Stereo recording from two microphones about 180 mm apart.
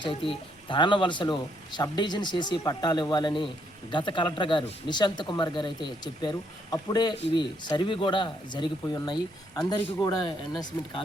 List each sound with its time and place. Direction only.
0.0 s speech: 30° left (ahead or behind)
10.7 s speech: 10° left (ahead or behind)